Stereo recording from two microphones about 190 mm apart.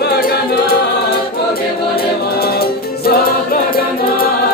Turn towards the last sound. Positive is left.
turn(degrees=50)  # may be behind; listen again after turning